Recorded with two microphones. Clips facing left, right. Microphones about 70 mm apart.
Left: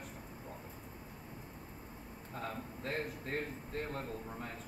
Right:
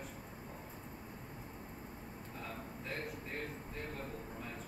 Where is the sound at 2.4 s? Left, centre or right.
Left.